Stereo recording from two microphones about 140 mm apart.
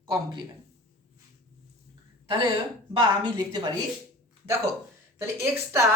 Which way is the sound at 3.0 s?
30° right (ahead or behind).